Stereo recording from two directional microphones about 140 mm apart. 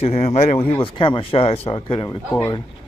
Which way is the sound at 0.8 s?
35° left (ahead or behind).